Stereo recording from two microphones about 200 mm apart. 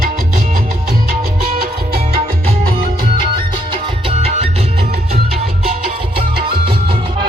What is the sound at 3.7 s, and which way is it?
Music, 30° right (ahead or behind).